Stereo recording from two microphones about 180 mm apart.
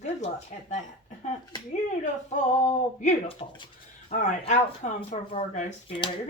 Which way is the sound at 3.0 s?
30° left (ahead or behind).